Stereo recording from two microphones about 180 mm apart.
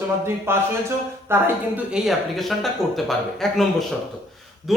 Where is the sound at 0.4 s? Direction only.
15° right (ahead or behind); by 3.6 s centre (ahead or behind).